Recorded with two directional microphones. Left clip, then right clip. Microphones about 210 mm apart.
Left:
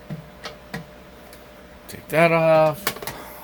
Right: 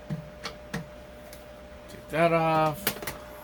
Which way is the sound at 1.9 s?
50° left (ahead or behind).